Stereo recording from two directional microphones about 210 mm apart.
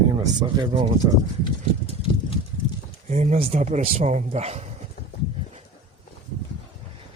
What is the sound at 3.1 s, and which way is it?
Speech, 30° right (ahead or behind).